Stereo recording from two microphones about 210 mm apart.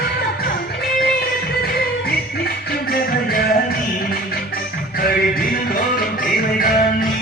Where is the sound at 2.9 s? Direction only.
45° left (ahead or behind).